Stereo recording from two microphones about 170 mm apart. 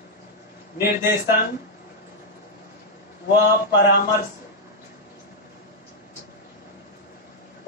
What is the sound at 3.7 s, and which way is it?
Speech, 80° left.